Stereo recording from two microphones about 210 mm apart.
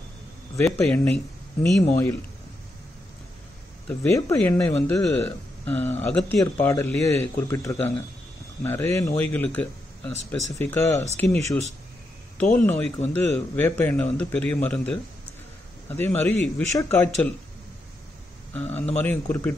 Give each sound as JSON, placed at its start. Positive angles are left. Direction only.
{"t": 0.7, "sound": "speech", "side_deg": 5}
{"t": 3.8, "sound": "speech", "side_deg": 10}
{"t": 12.5, "sound": "speech", "side_deg": 5}
{"t": 16.0, "sound": "speech", "side_deg": 10}
{"t": 18.5, "sound": "speech", "side_deg": 10}